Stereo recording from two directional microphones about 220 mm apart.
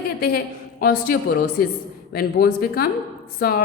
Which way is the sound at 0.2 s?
45° left (ahead or behind).